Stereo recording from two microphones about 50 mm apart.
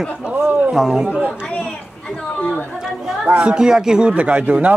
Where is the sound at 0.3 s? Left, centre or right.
Right.